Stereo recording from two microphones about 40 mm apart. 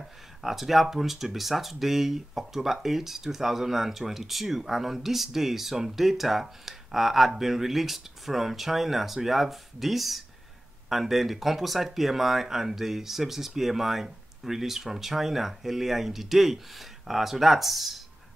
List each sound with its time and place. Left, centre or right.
0.4 s speech: centre